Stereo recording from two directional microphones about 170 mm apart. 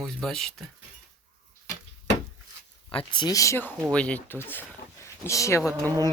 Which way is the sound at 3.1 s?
25° left (ahead or behind).